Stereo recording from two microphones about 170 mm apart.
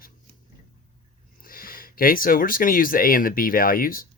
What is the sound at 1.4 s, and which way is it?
Speech, 55° left (ahead or behind).